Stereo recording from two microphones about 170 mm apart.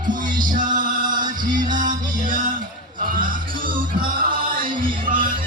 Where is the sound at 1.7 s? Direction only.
50° right (ahead or behind).